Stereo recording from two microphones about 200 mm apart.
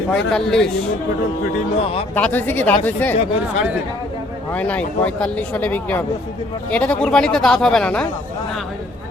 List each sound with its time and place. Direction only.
0.1 s speech: 5° left (ahead or behind)
1.8 s speech: 30° left (ahead or behind)
2.1 s speech: 10° left (ahead or behind)
4.5 s speech: 5° left (ahead or behind)